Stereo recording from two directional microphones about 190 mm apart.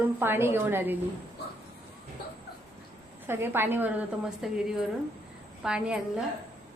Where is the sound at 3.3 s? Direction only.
10° right (ahead or behind).